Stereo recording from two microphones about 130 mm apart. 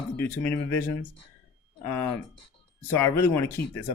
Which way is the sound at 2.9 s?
15° left (ahead or behind).